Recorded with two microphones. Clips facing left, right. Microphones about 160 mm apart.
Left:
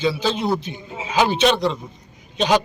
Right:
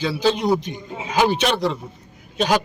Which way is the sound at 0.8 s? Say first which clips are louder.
Right 1 dB; 5° left (ahead or behind).